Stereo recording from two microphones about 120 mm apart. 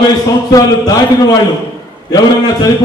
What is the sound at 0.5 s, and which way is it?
Speech, 30° left (ahead or behind).